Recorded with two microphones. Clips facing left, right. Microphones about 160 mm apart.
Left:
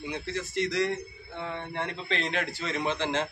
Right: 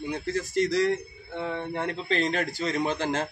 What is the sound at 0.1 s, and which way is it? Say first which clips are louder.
A man's voice: right 5 dB; 40° right (ahead or behind).